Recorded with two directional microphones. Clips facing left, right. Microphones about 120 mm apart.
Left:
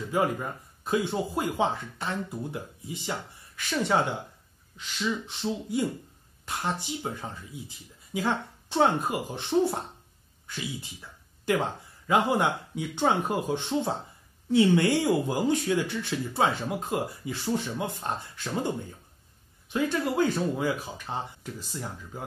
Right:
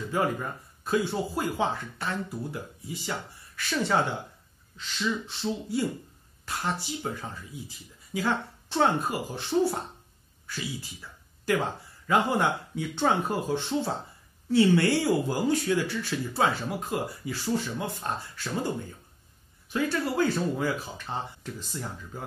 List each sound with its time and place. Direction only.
0.1 s speech: 15° left (ahead or behind)
19.7 s speech: 20° left (ahead or behind)